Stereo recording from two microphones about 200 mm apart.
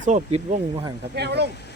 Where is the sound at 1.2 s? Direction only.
55° right (ahead or behind).